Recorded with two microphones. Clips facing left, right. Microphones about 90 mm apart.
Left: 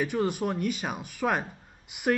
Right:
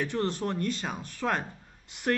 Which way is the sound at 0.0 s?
10° left (ahead or behind).